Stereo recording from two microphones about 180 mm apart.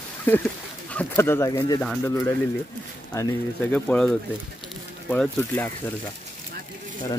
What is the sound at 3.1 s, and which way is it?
Speech, 15° left (ahead or behind).